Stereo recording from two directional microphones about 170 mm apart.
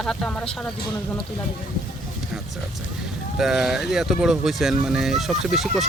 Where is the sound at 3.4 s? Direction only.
5° right (ahead or behind).